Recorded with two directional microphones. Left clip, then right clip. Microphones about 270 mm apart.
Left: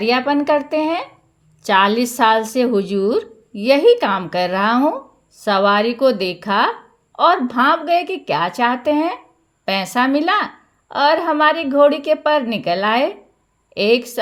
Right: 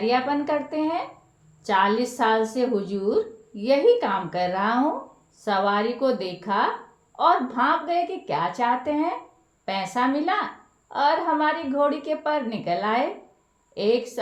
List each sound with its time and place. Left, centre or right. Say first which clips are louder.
0.0 s speech: left 6 dB; left